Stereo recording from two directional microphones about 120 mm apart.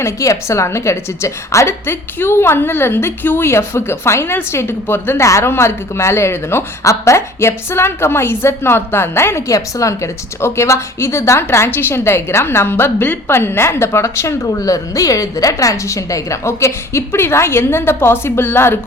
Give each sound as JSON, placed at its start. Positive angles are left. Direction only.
{"t": 0.0, "sound": "a woman's voice", "side_deg": 25}